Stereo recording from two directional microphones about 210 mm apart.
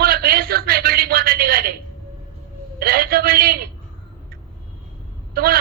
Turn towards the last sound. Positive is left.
turn(degrees=-45)  # may be behind; listen again after turning